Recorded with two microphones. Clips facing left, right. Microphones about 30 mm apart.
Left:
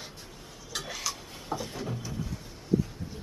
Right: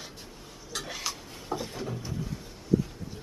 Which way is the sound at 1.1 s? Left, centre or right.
Centre.